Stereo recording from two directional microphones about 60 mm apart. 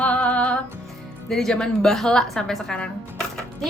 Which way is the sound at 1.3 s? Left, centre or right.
Centre.